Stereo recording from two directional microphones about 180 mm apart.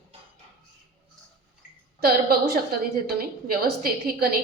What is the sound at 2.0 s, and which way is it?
A woman's voice, 60° right (ahead or behind).